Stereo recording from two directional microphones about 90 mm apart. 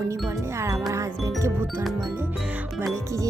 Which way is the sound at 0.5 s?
30° right (ahead or behind).